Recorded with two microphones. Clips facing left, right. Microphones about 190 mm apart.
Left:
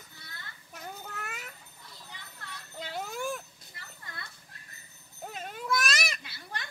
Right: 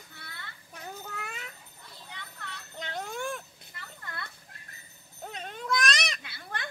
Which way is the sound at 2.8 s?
5° left (ahead or behind).